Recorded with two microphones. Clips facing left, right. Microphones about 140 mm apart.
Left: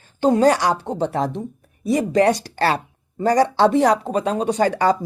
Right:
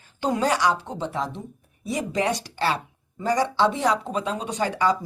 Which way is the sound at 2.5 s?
55° left (ahead or behind).